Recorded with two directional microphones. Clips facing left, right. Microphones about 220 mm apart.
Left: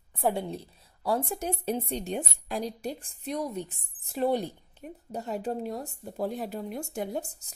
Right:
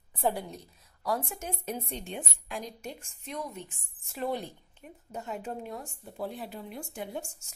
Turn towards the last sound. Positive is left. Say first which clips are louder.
# left 5 dB
turn(degrees=35)  # may be behind; listen again after turning